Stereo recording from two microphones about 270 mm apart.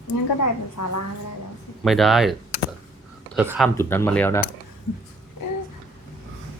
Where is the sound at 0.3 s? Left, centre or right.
Left.